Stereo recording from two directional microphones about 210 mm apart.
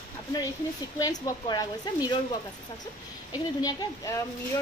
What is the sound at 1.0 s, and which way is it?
Speech, 20° left (ahead or behind).